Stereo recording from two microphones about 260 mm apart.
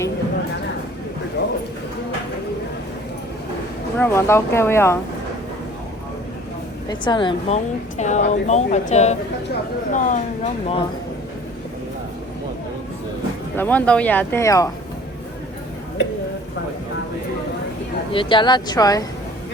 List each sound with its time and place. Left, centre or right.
1.4 s a sound: left
3.9 s speech: centre
6.8 s a woman's voice: centre
13.6 s speech: centre
18.1 s speech: centre